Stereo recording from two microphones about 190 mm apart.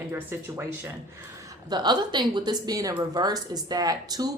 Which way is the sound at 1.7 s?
25° right (ahead or behind).